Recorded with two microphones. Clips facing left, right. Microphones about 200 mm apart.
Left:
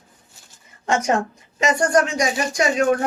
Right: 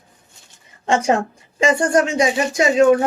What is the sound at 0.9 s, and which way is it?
Speech, 30° right (ahead or behind).